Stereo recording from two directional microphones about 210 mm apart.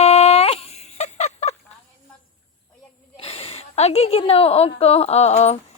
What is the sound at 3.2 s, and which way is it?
A woman's voice, 30° left (ahead or behind).